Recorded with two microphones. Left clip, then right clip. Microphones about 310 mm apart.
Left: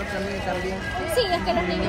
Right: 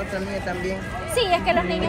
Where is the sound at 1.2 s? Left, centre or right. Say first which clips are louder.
Right 4 dB; right.